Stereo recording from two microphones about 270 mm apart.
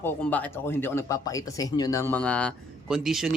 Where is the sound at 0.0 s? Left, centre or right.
Centre.